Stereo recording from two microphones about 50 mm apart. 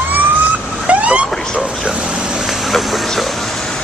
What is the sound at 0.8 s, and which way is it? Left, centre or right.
Vehicle, right.